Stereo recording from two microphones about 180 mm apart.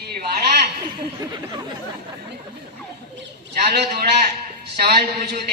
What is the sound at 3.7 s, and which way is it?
Speech, 60° right (ahead or behind).